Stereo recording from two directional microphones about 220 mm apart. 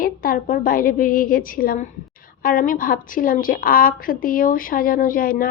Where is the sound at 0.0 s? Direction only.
40° left (ahead or behind).